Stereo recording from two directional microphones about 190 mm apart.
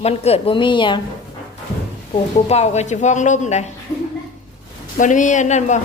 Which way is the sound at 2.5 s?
35° left (ahead or behind).